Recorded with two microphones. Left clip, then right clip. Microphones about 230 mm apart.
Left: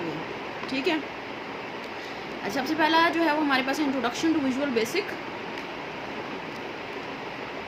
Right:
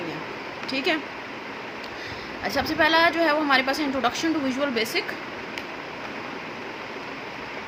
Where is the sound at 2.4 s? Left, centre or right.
Right.